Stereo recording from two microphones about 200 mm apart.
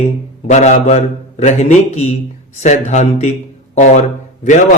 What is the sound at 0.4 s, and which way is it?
A man's voice, 35° left (ahead or behind).